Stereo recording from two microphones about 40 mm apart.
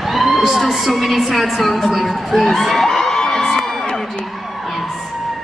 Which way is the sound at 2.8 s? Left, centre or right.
Centre.